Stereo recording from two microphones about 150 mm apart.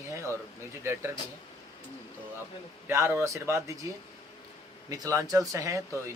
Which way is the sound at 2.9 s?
15° right (ahead or behind).